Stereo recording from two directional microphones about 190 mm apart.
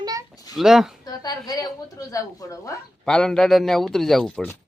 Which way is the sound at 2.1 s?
15° left (ahead or behind).